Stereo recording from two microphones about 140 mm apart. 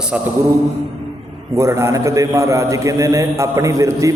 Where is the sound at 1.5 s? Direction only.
20° right (ahead or behind).